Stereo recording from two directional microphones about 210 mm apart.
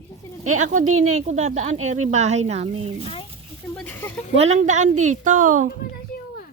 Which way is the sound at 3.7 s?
10° left (ahead or behind).